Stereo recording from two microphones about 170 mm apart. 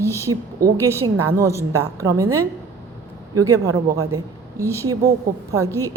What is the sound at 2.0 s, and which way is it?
Speech, 20° right (ahead or behind).